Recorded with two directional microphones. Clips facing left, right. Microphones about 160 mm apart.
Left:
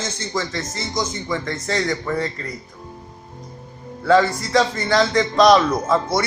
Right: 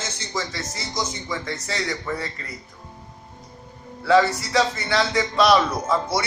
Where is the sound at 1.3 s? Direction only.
50° left (ahead or behind).